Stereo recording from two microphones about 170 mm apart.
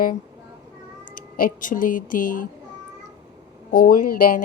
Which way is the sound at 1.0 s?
55° left (ahead or behind).